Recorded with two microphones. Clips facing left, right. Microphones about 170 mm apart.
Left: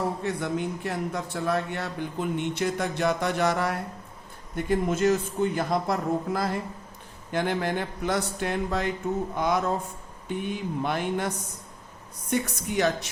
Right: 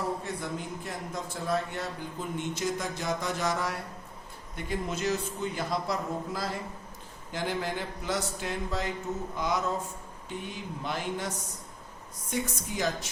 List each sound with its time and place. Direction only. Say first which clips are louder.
0.2 s a man's voice: left 7 dB; 70° left (ahead or behind)
4.5 s a man's voice: left 8 dB; 50° left (ahead or behind)
12.3 s speech: left 5 dB; 65° left (ahead or behind)